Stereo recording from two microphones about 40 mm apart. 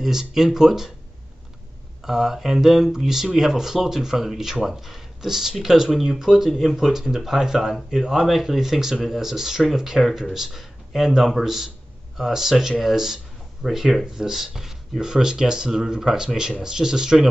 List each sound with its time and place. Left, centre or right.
0.0 s speech: centre
2.0 s speech: centre